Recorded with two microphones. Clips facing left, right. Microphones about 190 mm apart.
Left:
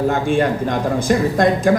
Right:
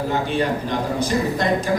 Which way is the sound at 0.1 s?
50° left (ahead or behind).